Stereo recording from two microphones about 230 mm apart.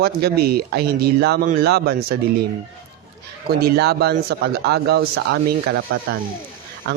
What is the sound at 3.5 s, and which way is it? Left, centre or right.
Speech, right.